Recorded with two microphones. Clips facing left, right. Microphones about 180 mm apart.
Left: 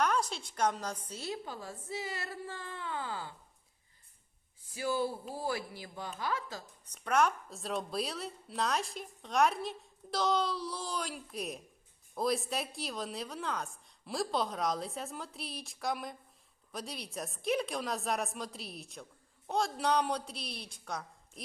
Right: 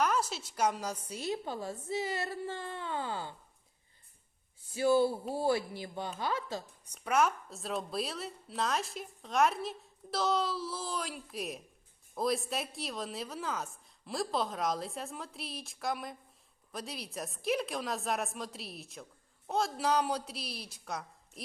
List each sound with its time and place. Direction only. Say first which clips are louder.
0.0 s a woman's voice: even; 5° right (ahead or behind); by 3.3 s 25° right (ahead or behind)
4.7 s a woman's voice: right 6 dB; 30° right (ahead or behind)
6.8 s a woman's voice: even; 10° right (ahead or behind)